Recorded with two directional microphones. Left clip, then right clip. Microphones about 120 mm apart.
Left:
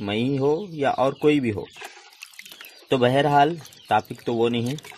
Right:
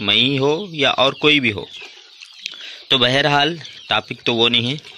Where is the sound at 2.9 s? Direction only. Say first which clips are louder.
Right 4 dB; 10° right (ahead or behind).